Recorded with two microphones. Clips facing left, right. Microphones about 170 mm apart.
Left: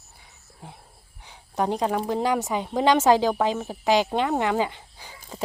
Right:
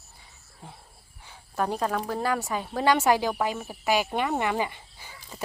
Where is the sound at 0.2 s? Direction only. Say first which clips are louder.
Left 2 dB; 15° left (ahead or behind).